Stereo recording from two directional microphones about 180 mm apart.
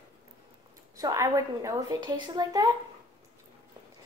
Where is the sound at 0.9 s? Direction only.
20° right (ahead or behind).